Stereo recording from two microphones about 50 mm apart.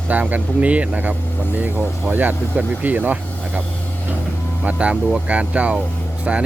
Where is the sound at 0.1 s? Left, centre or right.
Right.